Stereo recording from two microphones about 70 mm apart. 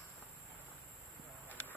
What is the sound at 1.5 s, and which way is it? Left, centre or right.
Clip-clop, left.